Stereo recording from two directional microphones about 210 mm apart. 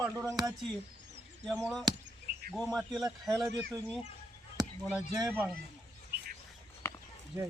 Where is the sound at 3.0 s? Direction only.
15° right (ahead or behind).